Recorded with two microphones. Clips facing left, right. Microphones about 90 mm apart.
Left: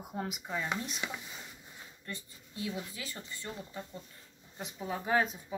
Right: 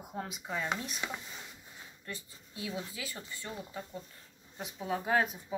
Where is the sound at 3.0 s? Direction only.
10° right (ahead or behind).